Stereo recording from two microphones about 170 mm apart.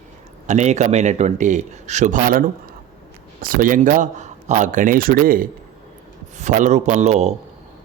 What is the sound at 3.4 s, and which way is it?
Speech, 55° right (ahead or behind).